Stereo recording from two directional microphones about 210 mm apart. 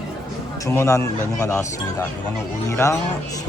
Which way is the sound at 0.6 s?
15° left (ahead or behind).